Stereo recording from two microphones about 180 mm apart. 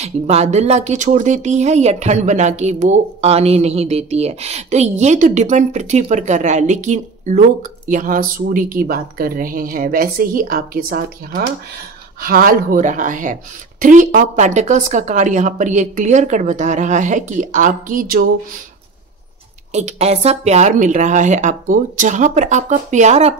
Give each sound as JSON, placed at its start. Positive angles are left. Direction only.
{"t": 0.0, "sound": "a woman's voice", "side_deg": -35}
{"t": 19.7, "sound": "a woman's voice", "side_deg": -40}